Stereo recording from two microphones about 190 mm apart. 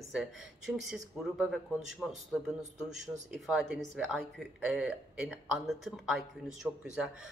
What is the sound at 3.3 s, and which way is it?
Speech, centre (ahead or behind).